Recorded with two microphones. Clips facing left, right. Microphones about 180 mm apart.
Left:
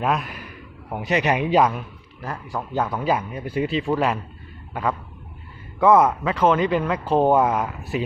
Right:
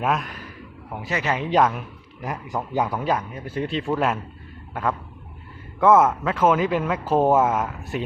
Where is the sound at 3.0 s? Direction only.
5° left (ahead or behind).